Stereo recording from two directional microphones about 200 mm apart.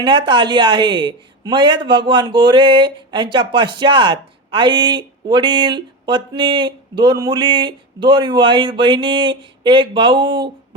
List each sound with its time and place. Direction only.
0.0 s speech: 25° right (ahead or behind)